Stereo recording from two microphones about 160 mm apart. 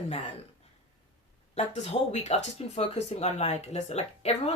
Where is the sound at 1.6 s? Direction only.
40° left (ahead or behind).